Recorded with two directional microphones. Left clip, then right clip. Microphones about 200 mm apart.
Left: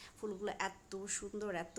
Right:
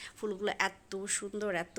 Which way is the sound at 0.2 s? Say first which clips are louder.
Right 7 dB; 10° right (ahead or behind).